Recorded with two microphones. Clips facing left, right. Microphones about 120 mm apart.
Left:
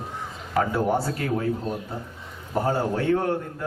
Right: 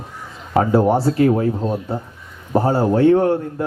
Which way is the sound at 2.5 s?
30° right (ahead or behind).